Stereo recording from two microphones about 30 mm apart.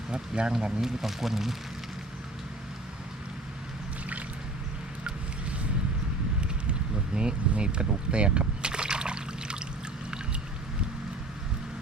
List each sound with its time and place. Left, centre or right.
0.1 s speech: right
0.8 s speech: centre
6.7 s a sound: right